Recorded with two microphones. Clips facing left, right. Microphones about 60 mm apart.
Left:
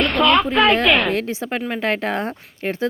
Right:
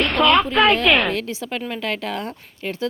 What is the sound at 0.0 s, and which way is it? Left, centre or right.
A woman's voice, centre.